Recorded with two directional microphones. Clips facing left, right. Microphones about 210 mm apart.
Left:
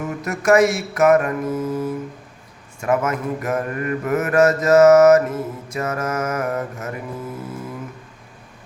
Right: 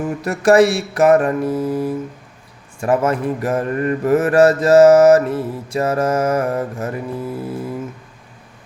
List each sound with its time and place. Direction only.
0.2 s mantra: 30° right (ahead or behind)